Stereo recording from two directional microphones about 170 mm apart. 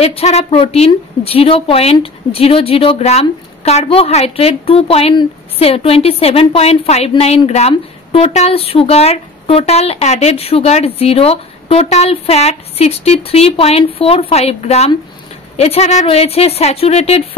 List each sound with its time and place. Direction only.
0.0 s a woman's voice: 40° left (ahead or behind)